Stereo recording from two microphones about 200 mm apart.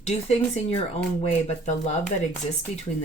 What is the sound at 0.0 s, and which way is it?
Speech, 30° left (ahead or behind).